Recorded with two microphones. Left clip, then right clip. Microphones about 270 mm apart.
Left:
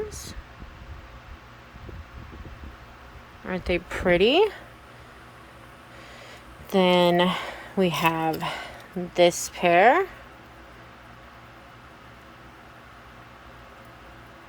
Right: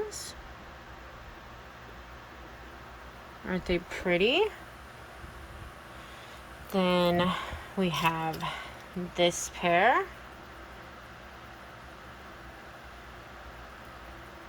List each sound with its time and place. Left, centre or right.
0.1 s a sound: centre
3.4 s speech: centre
6.7 s speech: left